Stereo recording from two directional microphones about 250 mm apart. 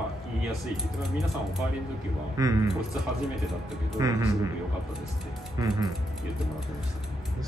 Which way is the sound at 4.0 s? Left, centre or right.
Centre.